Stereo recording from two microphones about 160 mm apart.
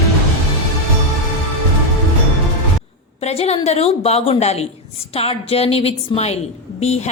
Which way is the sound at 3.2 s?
40° left (ahead or behind).